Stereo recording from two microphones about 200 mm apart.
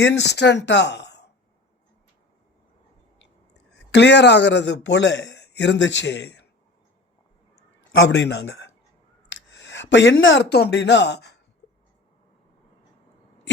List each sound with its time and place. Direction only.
0.0 s speech: 60° left (ahead or behind)
3.2 s speech: 60° left (ahead or behind)
8.1 s speech: 60° left (ahead or behind)